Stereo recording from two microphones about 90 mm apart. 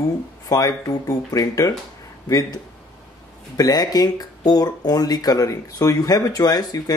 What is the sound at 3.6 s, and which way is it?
Speech, 45° left (ahead or behind).